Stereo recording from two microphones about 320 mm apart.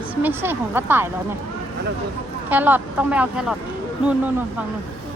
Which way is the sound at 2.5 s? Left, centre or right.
Centre.